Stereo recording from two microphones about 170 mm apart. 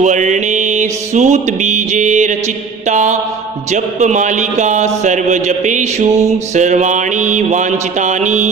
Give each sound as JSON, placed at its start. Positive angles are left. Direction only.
{"t": 0.0, "sound": "mantra", "side_deg": -45}
{"t": 2.9, "sound": "speech", "side_deg": -45}